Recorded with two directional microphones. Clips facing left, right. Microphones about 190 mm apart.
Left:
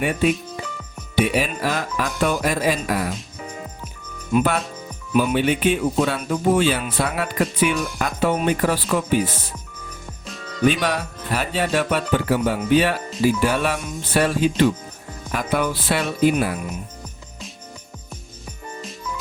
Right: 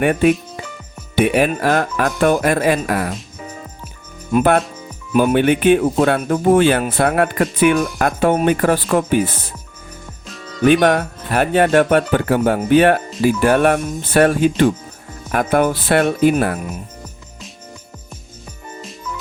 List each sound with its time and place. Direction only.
0.0 s speech: 55° right (ahead or behind)
4.3 s speech: 50° right (ahead or behind)
10.7 s speech: 55° right (ahead or behind)
18.8 s music: centre (ahead or behind)